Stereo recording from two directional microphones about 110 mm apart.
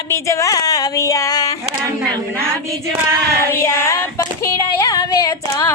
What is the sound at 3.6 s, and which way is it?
Female singing, 25° left (ahead or behind).